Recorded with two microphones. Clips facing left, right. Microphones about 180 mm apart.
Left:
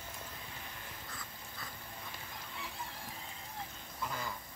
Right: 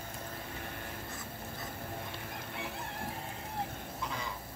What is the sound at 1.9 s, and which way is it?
Fowl, 60° right (ahead or behind).